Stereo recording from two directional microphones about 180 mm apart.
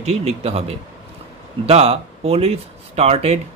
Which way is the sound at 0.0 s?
35° right (ahead or behind).